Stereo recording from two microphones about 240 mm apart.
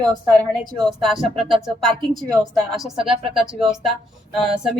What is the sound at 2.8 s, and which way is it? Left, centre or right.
Speech, centre.